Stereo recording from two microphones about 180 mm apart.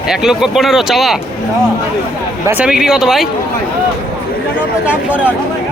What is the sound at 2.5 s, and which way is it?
Speech, 5° right (ahead or behind).